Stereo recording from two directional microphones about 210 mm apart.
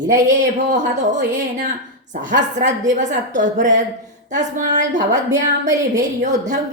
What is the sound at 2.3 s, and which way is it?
Speech, 35° right (ahead or behind).